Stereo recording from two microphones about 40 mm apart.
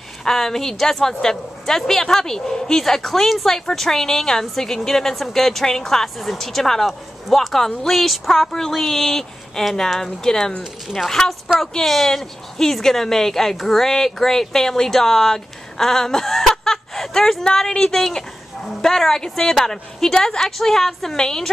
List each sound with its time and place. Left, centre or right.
0.2 s speech: centre
10.9 s speech: centre